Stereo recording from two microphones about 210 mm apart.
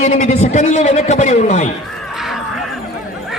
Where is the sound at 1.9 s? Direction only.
Centre (ahead or behind).